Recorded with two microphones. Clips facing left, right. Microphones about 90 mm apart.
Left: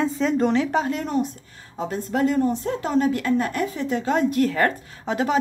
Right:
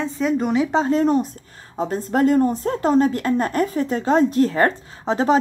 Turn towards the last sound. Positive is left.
turn(degrees=-30)  # may be behind; listen again after turning